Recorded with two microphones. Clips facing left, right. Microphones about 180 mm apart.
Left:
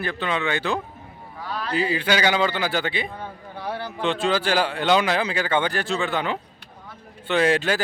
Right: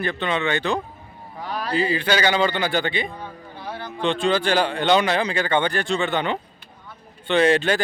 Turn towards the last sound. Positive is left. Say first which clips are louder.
# right 2 dB
turn(degrees=5)  # may be behind; listen again after turning